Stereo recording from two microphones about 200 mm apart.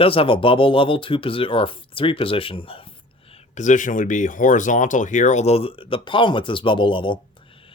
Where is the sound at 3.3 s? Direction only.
35° left (ahead or behind).